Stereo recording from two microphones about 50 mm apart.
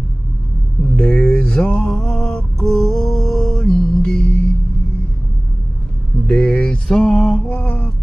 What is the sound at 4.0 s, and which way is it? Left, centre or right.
Music, centre.